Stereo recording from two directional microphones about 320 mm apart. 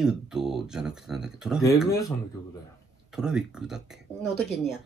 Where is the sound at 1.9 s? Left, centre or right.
Centre.